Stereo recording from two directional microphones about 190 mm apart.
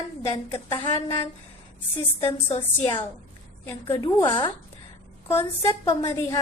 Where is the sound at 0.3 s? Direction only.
25° left (ahead or behind).